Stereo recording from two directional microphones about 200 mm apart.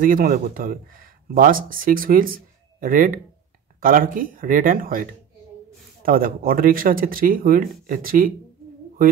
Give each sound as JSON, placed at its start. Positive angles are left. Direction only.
{"t": 0.0, "sound": "speech", "side_deg": -45}
{"t": 6.0, "sound": "speech", "side_deg": -45}